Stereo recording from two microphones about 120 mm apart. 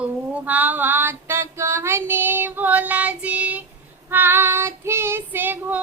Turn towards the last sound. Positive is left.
turn(degrees=-15)  # may be behind; listen again after turning